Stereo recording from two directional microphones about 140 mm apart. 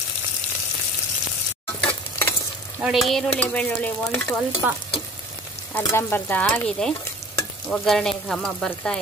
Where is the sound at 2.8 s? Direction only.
Centre (ahead or behind).